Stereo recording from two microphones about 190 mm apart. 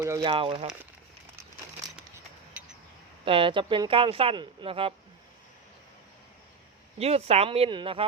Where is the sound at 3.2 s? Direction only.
30° right (ahead or behind).